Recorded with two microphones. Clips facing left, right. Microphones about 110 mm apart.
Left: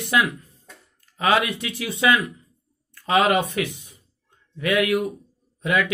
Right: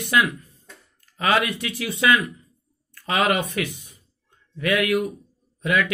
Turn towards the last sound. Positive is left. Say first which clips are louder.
# even
turn(degrees=20)  # may be behind; listen again after turning